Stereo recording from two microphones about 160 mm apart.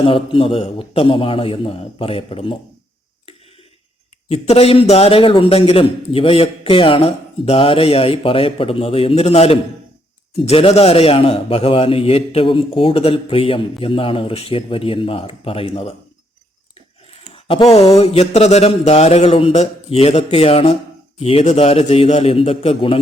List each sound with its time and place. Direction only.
0.0 s a man's voice: 30° left (ahead or behind)
4.3 s a man's voice: 40° left (ahead or behind)
17.3 s a man's voice: 35° left (ahead or behind)